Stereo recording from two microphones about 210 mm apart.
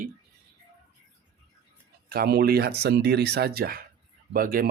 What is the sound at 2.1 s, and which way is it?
Speech, 50° right (ahead or behind).